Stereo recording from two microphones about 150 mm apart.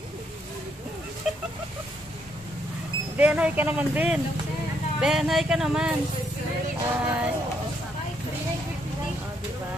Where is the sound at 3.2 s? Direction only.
10° right (ahead or behind).